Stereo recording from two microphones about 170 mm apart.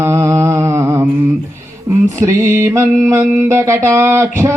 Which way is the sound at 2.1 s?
15° right (ahead or behind).